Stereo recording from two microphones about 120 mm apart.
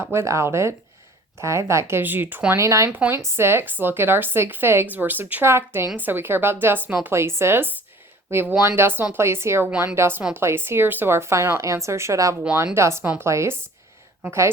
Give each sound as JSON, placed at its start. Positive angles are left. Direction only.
{"t": 0.1, "sound": "speech", "side_deg": -25}